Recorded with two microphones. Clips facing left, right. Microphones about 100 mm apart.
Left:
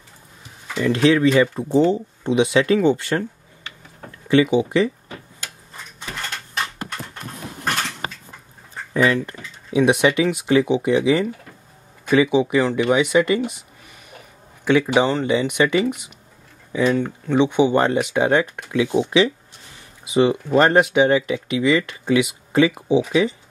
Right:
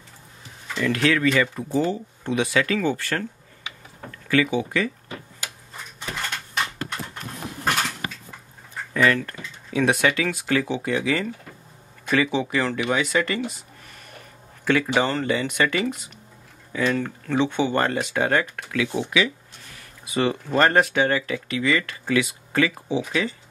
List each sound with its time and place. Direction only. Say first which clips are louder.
0.7 s speech: left 5 dB; 20° left (ahead or behind)
4.3 s speech: left 6 dB; 20° left (ahead or behind)
9.0 s speech: left 2 dB; 15° left (ahead or behind)
14.6 s speech: left 4 dB; 15° left (ahead or behind)